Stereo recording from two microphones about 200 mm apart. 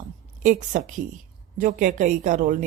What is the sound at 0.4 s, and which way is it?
A woman's voice, 40° right (ahead or behind).